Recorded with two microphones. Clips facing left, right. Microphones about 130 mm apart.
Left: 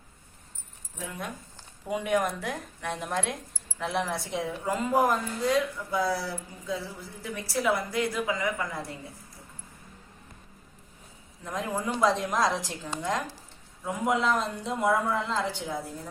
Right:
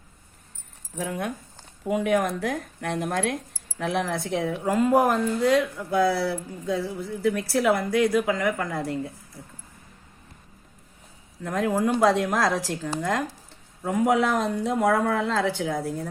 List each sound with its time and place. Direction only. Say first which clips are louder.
1.9 s a woman's voice: right 4 dB; 55° right (ahead or behind)
11.4 s a woman's voice: right 7 dB; 60° right (ahead or behind); by 15.8 s 85° right